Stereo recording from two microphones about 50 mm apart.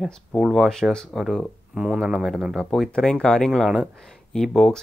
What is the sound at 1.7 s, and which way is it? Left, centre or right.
Speech, right.